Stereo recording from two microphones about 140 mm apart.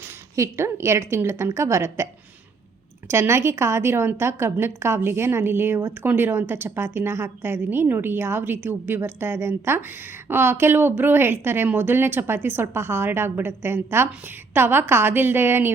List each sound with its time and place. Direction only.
0.3 s a woman's voice: 20° right (ahead or behind)
3.1 s a woman's voice: 20° right (ahead or behind)